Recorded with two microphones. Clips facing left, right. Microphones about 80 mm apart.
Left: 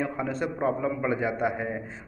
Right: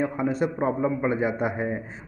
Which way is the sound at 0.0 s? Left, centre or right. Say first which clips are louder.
Right 4 dB; centre.